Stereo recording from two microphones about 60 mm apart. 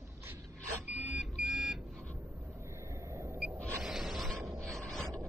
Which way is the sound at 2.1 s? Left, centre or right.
Right.